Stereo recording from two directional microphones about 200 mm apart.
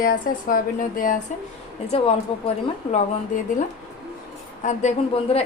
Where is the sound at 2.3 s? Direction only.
30° left (ahead or behind).